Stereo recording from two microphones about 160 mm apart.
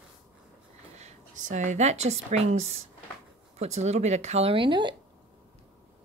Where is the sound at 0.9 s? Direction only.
45° right (ahead or behind); by 4.9 s 30° right (ahead or behind).